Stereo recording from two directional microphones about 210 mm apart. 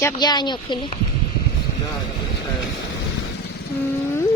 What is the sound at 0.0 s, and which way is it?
Speech, 20° left (ahead or behind).